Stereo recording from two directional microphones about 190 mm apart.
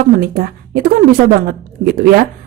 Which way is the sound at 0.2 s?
50° right (ahead or behind).